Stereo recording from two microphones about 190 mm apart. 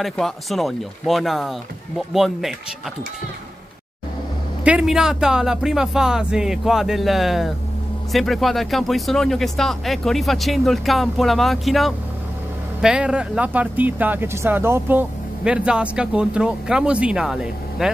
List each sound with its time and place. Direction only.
0.0 s speech: centre (ahead or behind)
4.6 s speech: 5° right (ahead or behind)